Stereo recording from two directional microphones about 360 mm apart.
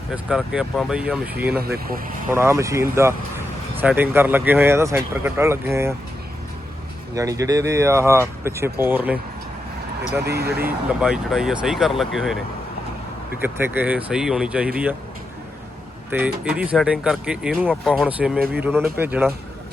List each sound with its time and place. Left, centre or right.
0.1 s speech: centre
1.5 s speech: right
2.3 s speech: centre
7.2 s speech: centre
10.2 s speech: right
10.6 s speech: centre
13.4 s speech: centre
16.1 s speech: centre